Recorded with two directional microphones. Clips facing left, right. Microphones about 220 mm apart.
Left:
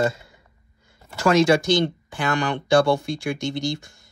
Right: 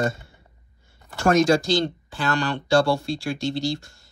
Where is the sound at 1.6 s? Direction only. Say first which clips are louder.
Left 2 dB; 20° left (ahead or behind).